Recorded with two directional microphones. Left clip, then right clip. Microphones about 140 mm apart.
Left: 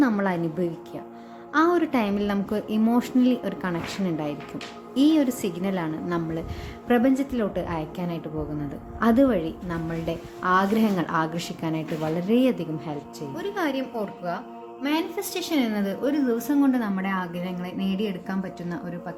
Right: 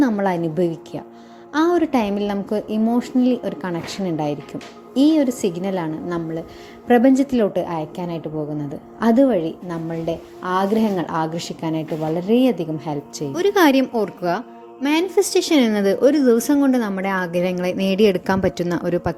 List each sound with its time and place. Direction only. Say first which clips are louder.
0.0 s a woman's voice: right 4 dB; 30° right (ahead or behind)
1.5 s a woman's voice: right 3 dB; 25° right (ahead or behind)
7.1 s a woman's voice: right 8 dB; 40° right (ahead or behind); by 12.6 s 25° right (ahead or behind)
13.1 s a woman's voice: right 14 dB; 65° right (ahead or behind); by 13.8 s 90° right
13.9 s a woman's voice: right 9 dB; 60° right (ahead or behind)
14.8 s a woman's voice: right 9 dB; 50° right (ahead or behind); by 19.1 s 90° right